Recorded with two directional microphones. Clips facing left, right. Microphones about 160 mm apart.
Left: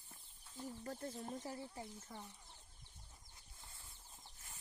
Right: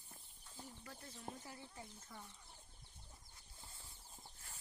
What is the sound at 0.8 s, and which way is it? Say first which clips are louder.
Speech: left 7 dB; 45° left (ahead or behind).